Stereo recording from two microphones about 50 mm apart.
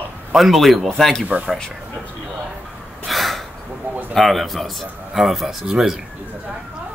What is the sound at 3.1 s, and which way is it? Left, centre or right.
Gasp, centre.